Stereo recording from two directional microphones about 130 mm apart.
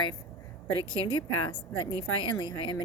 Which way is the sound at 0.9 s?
35° left (ahead or behind).